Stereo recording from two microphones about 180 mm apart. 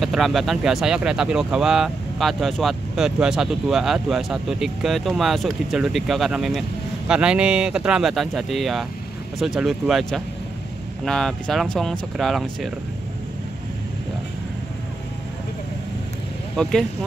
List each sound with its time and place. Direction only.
0.0 s speech: centre (ahead or behind)
16.6 s speech: 5° left (ahead or behind)